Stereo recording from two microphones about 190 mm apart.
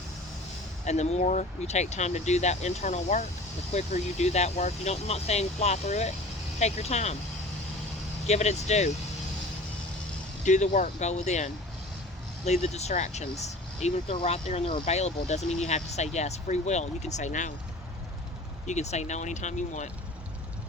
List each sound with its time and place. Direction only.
0.9 s speech: 35° left (ahead or behind)
8.3 s speech: 35° left (ahead or behind)
10.4 s speech: 40° left (ahead or behind)
18.6 s speech: 35° left (ahead or behind)